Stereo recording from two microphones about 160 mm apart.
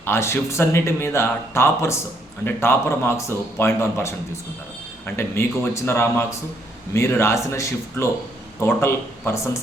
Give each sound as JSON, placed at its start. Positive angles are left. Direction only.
{"t": 0.0, "sound": "speech", "side_deg": 15}